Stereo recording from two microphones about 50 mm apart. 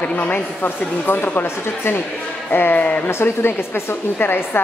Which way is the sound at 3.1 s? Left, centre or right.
Left.